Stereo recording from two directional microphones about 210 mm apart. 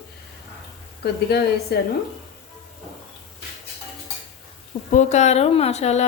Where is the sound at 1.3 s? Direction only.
50° left (ahead or behind).